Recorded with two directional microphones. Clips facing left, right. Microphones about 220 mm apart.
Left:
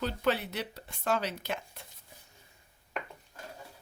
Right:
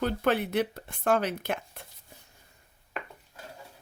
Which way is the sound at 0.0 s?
55° right (ahead or behind).